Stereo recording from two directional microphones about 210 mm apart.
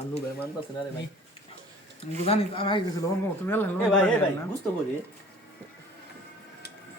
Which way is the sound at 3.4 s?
10° left (ahead or behind).